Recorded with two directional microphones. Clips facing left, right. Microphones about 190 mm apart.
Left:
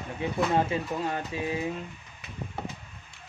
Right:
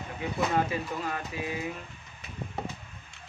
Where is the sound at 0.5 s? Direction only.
30° left (ahead or behind).